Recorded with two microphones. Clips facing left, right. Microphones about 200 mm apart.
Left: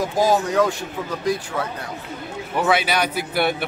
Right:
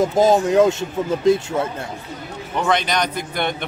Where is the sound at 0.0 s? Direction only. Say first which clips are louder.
Right 4 dB; 25° right (ahead or behind).